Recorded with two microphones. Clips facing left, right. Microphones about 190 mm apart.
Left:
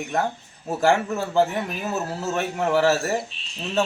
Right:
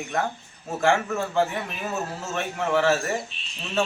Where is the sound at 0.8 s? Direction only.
35° left (ahead or behind).